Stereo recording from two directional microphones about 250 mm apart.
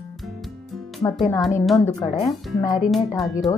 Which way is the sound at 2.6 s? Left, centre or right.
Left.